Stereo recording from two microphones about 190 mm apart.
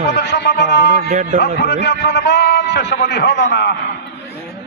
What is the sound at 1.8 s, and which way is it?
A man's voice, 65° left (ahead or behind).